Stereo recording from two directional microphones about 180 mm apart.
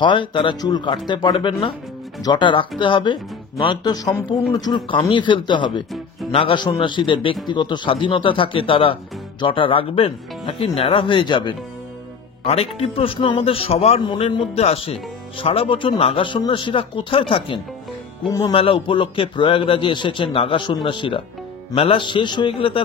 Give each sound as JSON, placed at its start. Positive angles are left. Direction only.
{"t": 0.0, "sound": "a man's voice", "side_deg": 25}